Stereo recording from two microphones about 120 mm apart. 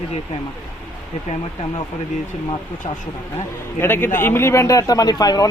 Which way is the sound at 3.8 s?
20° left (ahead or behind).